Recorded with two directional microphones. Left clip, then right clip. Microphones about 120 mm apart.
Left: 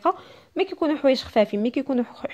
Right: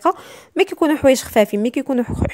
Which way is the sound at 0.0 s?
40° right (ahead or behind).